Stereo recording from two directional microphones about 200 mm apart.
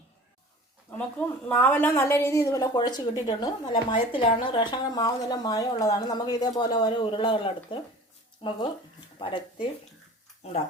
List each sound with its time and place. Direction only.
1.5 s a woman's voice: 10° left (ahead or behind); by 10.6 s 30° left (ahead or behind)